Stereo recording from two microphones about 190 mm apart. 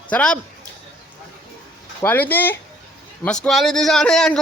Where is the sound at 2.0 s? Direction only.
10° left (ahead or behind).